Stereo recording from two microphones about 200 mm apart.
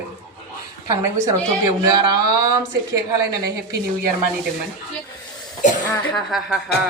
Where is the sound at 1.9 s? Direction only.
20° right (ahead or behind).